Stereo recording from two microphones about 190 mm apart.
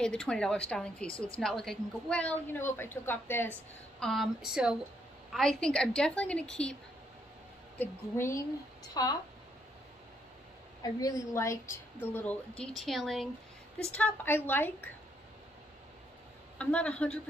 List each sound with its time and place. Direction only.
0.0 s a woman's voice: 5° left (ahead or behind); by 9.1 s 20° left (ahead or behind)
10.8 s a woman's voice: 20° left (ahead or behind)
16.5 s a woman's voice: 5° left (ahead or behind)